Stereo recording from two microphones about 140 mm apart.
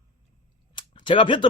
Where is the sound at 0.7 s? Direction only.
35° left (ahead or behind).